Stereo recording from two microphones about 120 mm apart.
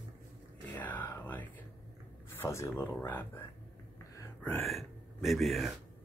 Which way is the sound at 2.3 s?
20° left (ahead or behind).